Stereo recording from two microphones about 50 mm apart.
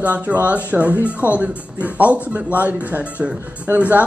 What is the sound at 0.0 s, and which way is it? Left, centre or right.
Speech, right.